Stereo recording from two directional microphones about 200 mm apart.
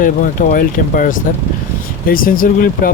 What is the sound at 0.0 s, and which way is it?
Speech, 40° left (ahead or behind).